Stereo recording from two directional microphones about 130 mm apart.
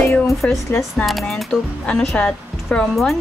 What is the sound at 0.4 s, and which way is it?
Speech, 10° left (ahead or behind).